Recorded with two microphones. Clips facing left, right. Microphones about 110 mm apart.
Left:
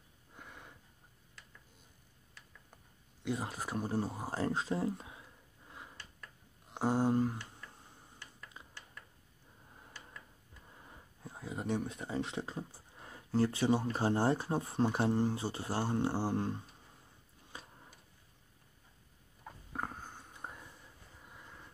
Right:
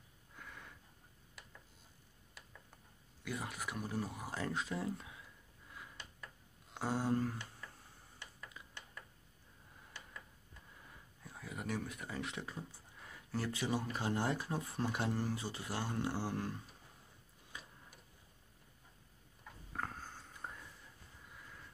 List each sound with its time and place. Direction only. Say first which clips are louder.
0.4 s sniff: left 1 dB; 20° left (ahead or behind)
3.3 s speech: left 5 dB; 30° left (ahead or behind)
6.7 s a sound: left 5 dB; 25° left (ahead or behind)
8.6 s mechanisms: left 2 dB; 30° left (ahead or behind)
10.9 s speech: left 6 dB; 25° left (ahead or behind)
17.5 s tick-tock: left 2 dB; 30° left (ahead or behind)
19.7 s a sound: left 2 dB; 15° left (ahead or behind)